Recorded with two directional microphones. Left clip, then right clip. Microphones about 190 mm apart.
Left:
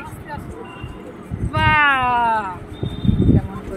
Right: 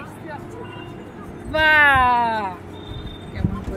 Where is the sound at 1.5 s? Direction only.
30° right (ahead or behind).